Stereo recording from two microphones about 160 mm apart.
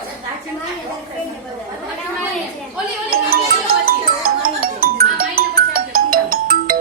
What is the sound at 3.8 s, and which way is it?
Music, 65° right (ahead or behind).